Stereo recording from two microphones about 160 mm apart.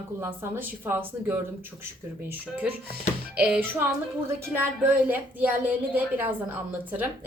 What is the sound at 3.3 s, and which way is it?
Speech, 10° right (ahead or behind).